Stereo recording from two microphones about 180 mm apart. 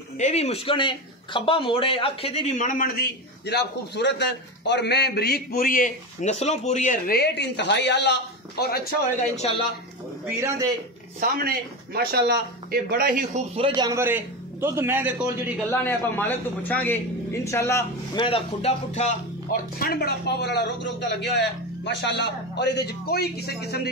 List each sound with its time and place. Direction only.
0.2 s speech: 35° left (ahead or behind)
3.4 s a man's voice: 70° left (ahead or behind)
9.3 s speech: 35° left (ahead or behind)
10.2 s a man's voice: 15° right (ahead or behind)
11.1 s a man's voice: 55° right (ahead or behind)
13.7 s a man's voice: 15° right (ahead or behind)
15.7 s a man's voice: 10° left (ahead or behind)
18.2 s speech: 30° left (ahead or behind)
18.9 s speech: 45° left (ahead or behind); by 23.9 s 60° left (ahead or behind)